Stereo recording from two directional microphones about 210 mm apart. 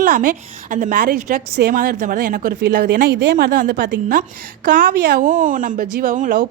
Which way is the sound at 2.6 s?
55° right (ahead or behind).